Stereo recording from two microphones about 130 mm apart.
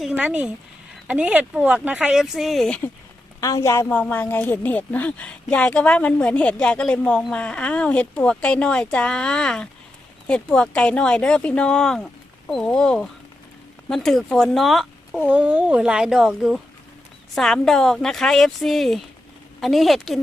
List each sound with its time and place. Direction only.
0.2 s speech: 10° right (ahead or behind); by 2.8 s 5° left (ahead or behind)
3.4 s a woman's voice: 25° left (ahead or behind)
3.8 s speech: 10° left (ahead or behind)
15.2 s speech: 15° right (ahead or behind)